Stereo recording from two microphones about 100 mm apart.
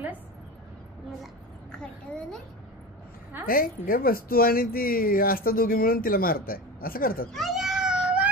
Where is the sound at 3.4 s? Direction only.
20° right (ahead or behind).